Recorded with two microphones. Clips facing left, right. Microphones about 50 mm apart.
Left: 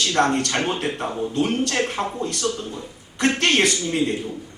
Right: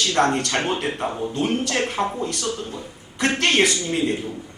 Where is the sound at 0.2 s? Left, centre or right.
Centre.